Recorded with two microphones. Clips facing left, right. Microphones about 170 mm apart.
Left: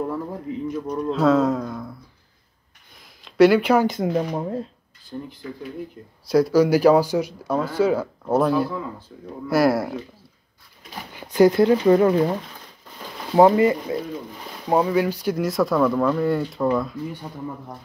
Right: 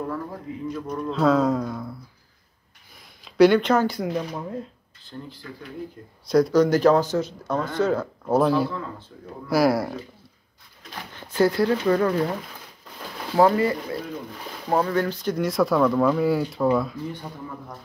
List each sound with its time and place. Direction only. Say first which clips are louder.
0.1 s a sound: left 3 dB; 20° left (ahead or behind)
1.1 s speech: left 1 dB; centre (ahead or behind)
3.3 s speech: left 1 dB; centre (ahead or behind)
3.8 s speech: left 3 dB; 20° left (ahead or behind)
4.1 s speech: left 5 dB; 40° left (ahead or behind)
5.0 s speech: left 5 dB; 20° left (ahead or behind)
6.2 s speech: left 1 dB; 5° left (ahead or behind)
10.8 s speech: left 2 dB; 10° left (ahead or behind)
13.4 s speech: left 4 dB; 20° left (ahead or behind); by 17.0 s 5° right (ahead or behind)